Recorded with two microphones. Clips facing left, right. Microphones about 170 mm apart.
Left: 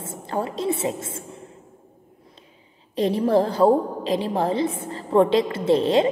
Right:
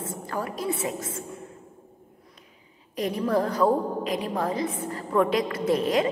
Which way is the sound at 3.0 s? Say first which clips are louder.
Left 5 dB; 30° left (ahead or behind).